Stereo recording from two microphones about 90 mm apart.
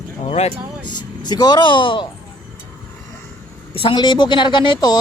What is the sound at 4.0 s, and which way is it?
Speech, 55° left (ahead or behind).